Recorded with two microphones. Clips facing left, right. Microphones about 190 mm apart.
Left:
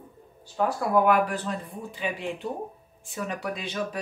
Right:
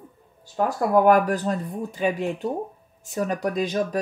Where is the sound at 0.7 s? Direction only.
45° right (ahead or behind).